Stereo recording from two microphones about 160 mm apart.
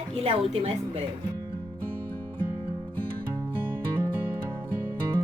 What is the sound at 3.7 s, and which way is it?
Music, 10° right (ahead or behind).